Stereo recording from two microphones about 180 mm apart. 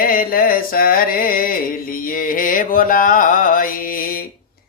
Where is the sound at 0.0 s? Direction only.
55° left (ahead or behind).